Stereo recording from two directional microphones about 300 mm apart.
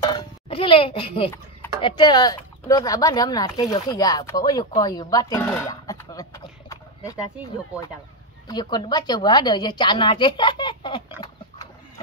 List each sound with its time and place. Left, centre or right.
0.1 s a child's voice: centre
8.5 s a woman's voice: centre
11.1 s livestock: centre